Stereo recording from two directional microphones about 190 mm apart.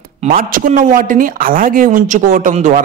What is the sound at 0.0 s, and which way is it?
Speech, 40° right (ahead or behind).